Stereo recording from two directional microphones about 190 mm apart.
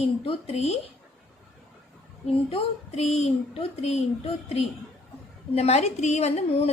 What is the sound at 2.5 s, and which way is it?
Speech, 35° left (ahead or behind).